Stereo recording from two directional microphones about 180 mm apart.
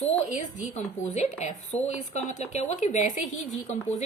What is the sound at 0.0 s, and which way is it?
A woman's voice, 45° left (ahead or behind).